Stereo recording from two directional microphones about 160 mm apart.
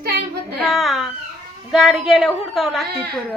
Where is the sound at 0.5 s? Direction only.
Centre (ahead or behind).